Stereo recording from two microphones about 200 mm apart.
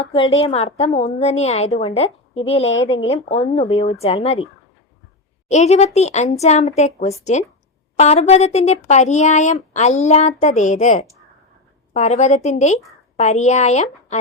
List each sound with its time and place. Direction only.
0.0 s speech: 30° left (ahead or behind)
5.5 s speech: 35° left (ahead or behind)